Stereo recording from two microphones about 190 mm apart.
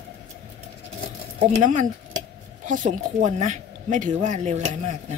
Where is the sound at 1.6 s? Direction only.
40° right (ahead or behind).